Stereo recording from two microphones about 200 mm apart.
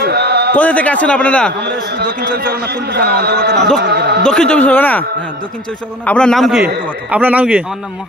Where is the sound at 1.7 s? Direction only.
55° right (ahead or behind).